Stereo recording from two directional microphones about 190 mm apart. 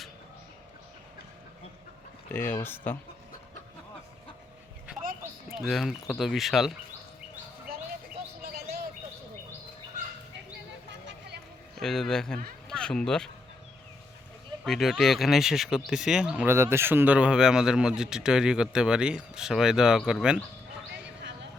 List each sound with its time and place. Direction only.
2.3 s speech: 10° left (ahead or behind)
5.5 s speech: centre (ahead or behind)
8.4 s chirp: 55° right (ahead or behind)
11.8 s speech: centre (ahead or behind)
12.6 s a sound: 5° left (ahead or behind)
14.6 s speech: centre (ahead or behind)